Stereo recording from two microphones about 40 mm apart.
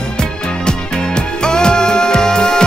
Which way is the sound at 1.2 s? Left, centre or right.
Left.